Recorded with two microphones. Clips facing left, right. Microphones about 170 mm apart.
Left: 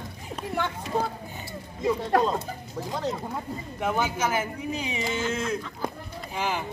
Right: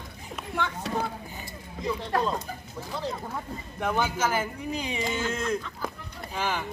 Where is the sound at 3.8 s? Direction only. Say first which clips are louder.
Even; 5° left (ahead or behind).